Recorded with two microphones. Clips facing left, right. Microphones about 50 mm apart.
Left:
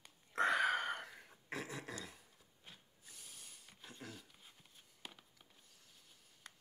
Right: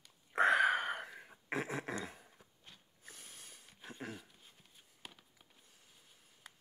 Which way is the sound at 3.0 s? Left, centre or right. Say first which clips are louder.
Right 5 dB; right.